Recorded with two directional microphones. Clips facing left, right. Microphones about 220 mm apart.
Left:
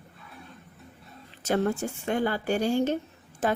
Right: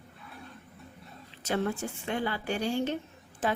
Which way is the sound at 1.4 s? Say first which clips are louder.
Left 4 dB; 45° left (ahead or behind).